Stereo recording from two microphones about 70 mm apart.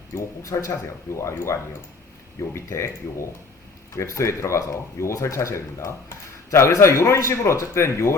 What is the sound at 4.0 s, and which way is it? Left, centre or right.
A man's voice, left.